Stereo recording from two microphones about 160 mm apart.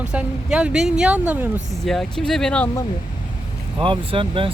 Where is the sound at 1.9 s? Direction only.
Centre (ahead or behind).